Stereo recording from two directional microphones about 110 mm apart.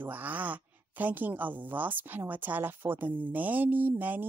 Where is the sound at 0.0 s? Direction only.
15° right (ahead or behind).